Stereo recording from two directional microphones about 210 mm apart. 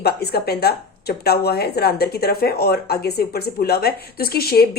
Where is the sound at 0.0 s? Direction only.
50° left (ahead or behind).